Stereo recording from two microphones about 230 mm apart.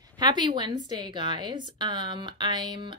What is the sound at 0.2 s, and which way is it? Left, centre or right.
A woman's voice, centre.